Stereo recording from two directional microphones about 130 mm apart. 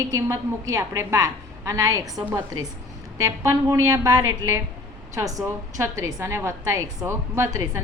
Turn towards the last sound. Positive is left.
turn(degrees=-25)  # may be behind; listen again after turning